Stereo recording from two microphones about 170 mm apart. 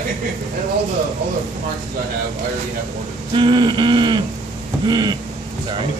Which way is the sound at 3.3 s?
25° right (ahead or behind).